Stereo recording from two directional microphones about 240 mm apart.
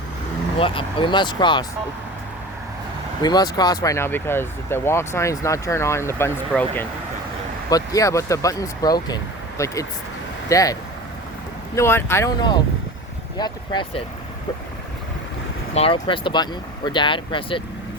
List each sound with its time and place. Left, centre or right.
0.6 s speech: left
3.2 s speech: centre
15.7 s speech: left